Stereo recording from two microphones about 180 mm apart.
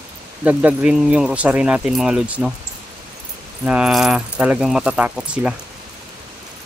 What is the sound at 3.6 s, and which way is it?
Speech, 5° right (ahead or behind).